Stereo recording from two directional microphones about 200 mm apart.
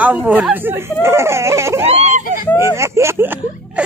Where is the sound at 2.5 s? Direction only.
15° right (ahead or behind).